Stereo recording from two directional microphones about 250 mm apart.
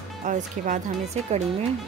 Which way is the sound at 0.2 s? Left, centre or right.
Right.